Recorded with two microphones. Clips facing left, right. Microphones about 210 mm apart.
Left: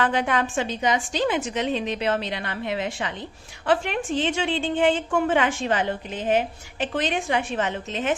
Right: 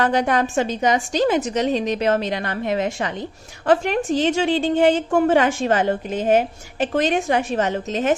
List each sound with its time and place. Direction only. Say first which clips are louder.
0.0 s a woman's voice: right 4 dB; 40° right (ahead or behind)